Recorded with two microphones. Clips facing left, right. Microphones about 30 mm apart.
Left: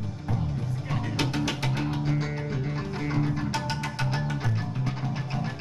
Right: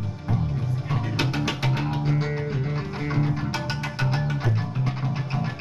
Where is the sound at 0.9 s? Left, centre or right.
Centre.